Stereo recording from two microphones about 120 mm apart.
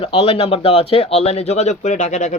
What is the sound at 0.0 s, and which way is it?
Speech, 55° left (ahead or behind).